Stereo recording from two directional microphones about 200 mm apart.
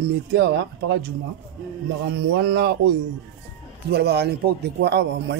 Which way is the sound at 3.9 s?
55° right (ahead or behind).